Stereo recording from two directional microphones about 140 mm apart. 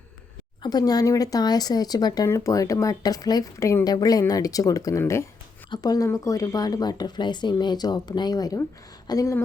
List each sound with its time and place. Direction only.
0.6 s speech: 30° left (ahead or behind)